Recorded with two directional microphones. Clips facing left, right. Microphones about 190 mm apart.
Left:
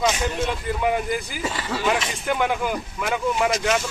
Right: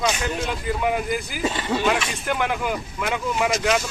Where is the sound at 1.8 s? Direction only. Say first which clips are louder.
Right 1 dB; centre (ahead or behind).